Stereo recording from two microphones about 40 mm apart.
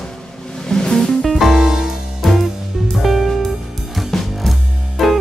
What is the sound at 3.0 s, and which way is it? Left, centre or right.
Music, centre.